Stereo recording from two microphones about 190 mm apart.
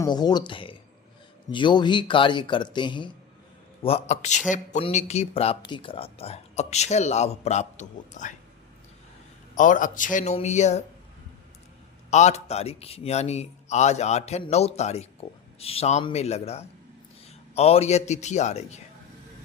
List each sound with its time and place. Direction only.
0.0 s a man's voice: 20° left (ahead or behind); by 8.4 s 40° left (ahead or behind)
9.6 s a man's voice: 45° left (ahead or behind)
12.1 s a man's voice: 35° left (ahead or behind)